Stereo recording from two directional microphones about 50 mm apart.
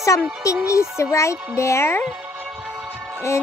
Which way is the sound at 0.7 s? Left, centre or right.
Left.